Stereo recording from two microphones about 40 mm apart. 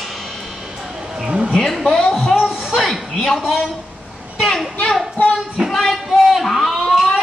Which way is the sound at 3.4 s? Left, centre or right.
Centre.